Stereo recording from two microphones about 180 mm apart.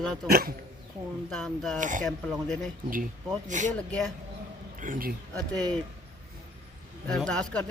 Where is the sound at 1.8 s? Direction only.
45° right (ahead or behind).